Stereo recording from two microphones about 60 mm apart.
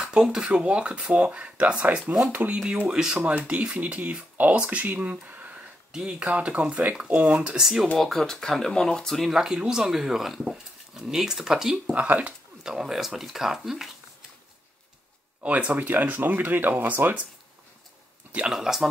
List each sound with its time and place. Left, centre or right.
0.1 s speech: centre; by 2.6 s right
2.9 s speech: centre
3.2 s speech: right
5.9 s speech: centre
7.5 s speech: centre
8.0 s speech: centre
11.9 s speech: right
12.6 s speech: centre
15.4 s speech: right
18.5 s speech: centre